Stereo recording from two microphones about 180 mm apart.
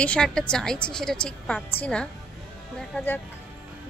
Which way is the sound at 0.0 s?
5° left (ahead or behind).